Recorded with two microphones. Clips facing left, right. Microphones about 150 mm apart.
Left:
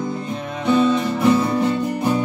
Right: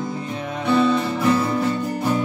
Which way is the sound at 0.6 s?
15° left (ahead or behind).